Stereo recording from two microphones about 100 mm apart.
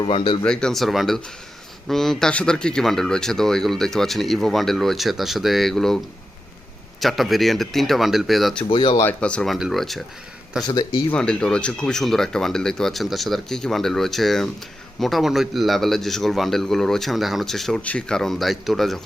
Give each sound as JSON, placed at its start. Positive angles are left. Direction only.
{"t": 0.0, "sound": "speech", "side_deg": 60}
{"t": 0.4, "sound": "speech", "side_deg": 10}
{"t": 7.0, "sound": "speech", "side_deg": 0}
{"t": 8.7, "sound": "speech", "side_deg": 65}
{"t": 9.0, "sound": "speech", "side_deg": 10}
{"t": 9.5, "sound": "speech", "side_deg": 0}
{"t": 10.7, "sound": "speech", "side_deg": 50}
{"t": 11.1, "sound": "speech", "side_deg": 10}